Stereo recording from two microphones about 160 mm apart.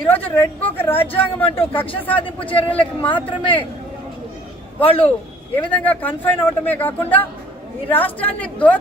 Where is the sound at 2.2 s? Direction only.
35° left (ahead or behind).